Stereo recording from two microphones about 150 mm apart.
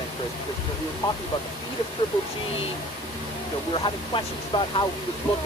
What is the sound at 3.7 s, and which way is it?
Speech, 35° left (ahead or behind).